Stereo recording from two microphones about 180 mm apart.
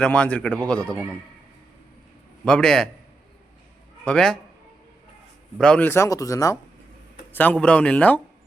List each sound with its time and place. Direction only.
0.0 s speech: 5° left (ahead or behind)
2.4 s a man's voice: 5° left (ahead or behind)
4.0 s a man's voice: 5° left (ahead or behind)
5.5 s speech: 5° left (ahead or behind)
7.3 s speech: 10° left (ahead or behind)